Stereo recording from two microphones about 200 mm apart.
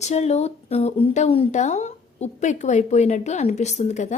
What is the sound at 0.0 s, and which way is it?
A woman's voice, 35° left (ahead or behind).